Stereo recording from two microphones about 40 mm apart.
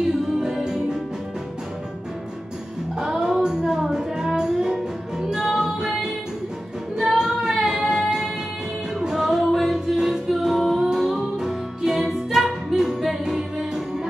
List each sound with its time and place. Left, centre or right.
0.4 s music: centre
3.0 s music: centre
7.0 s child singing: centre
9.0 s music: centre
12.0 s music: centre
13.2 s music: centre